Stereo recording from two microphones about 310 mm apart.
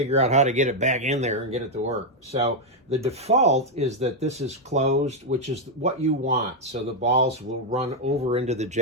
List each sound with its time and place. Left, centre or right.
0.0 s speech: right